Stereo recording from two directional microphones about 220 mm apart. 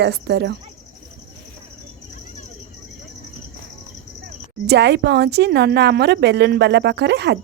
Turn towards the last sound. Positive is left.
turn(degrees=-50)  # may be behind; listen again after turning